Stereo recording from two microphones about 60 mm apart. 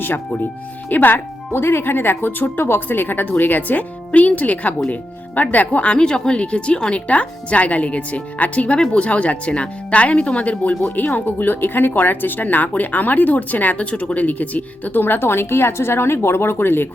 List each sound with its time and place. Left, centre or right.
0.9 s speech: left